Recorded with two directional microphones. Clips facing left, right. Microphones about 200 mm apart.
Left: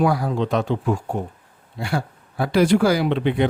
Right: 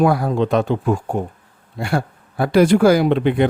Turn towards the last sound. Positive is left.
turn(degrees=-50)  # may be behind; listen again after turning